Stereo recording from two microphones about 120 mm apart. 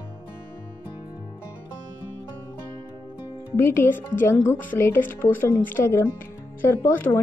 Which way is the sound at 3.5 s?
20° left (ahead or behind).